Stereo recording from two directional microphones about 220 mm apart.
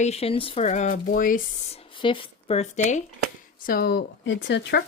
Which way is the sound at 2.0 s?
25° left (ahead or behind).